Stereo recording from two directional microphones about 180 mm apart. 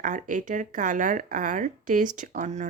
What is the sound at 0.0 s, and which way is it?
Speech, 45° right (ahead or behind).